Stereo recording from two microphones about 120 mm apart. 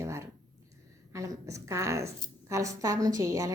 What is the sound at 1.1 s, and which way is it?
A woman's voice, 25° right (ahead or behind).